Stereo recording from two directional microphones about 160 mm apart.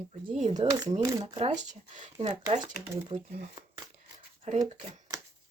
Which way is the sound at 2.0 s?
35° right (ahead or behind).